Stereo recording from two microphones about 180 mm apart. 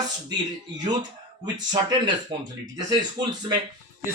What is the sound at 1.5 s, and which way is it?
Speech, 25° right (ahead or behind).